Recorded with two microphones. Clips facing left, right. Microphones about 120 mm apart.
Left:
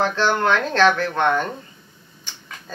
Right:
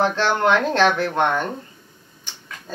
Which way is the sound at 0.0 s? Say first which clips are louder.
Right 1 dB; 20° right (ahead or behind).